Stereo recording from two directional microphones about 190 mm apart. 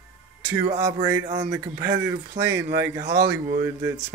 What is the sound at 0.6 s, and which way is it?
Speech, 40° right (ahead or behind).